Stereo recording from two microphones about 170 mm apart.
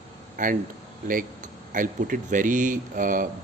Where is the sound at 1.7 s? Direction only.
50° right (ahead or behind).